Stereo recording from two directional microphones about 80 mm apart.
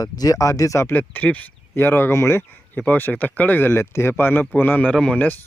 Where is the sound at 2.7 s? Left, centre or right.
Centre.